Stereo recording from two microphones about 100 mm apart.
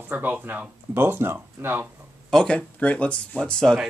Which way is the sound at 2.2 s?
10° left (ahead or behind).